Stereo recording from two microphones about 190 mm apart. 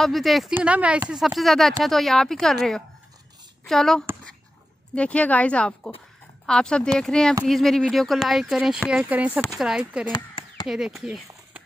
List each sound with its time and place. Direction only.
0.0 s speech: centre (ahead or behind)
10.1 s a sound: 20° left (ahead or behind)
10.7 s speech: 5° right (ahead or behind)